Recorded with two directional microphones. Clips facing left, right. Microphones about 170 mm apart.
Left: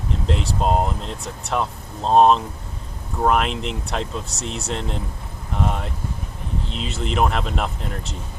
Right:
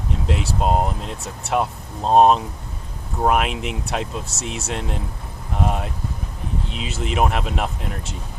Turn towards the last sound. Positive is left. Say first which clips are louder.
# even
turn(degrees=-5)  # may be behind; listen again after turning